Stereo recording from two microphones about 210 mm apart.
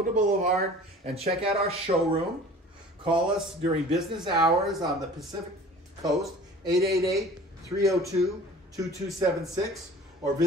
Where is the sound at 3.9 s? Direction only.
Centre (ahead or behind).